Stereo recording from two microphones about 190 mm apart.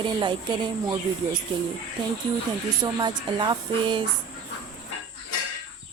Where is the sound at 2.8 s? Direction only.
25° right (ahead or behind).